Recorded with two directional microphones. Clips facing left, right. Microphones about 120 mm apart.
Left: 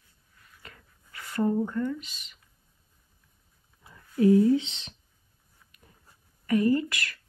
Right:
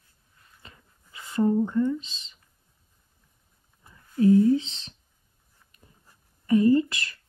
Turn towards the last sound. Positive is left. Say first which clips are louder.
# right 4 dB
turn(degrees=-25)  # may be behind; listen again after turning